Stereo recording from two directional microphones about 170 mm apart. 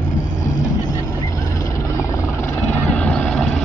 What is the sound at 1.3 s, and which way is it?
Vehicle, 20° left (ahead or behind).